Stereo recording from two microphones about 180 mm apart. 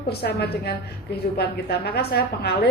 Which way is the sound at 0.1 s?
60° left (ahead or behind).